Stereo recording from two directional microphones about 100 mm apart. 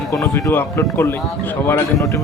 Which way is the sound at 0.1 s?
30° left (ahead or behind).